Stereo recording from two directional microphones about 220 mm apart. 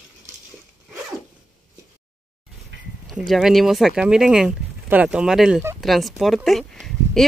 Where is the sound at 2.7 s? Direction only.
55° right (ahead or behind).